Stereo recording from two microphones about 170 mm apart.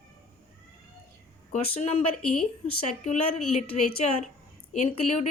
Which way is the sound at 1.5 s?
35° left (ahead or behind).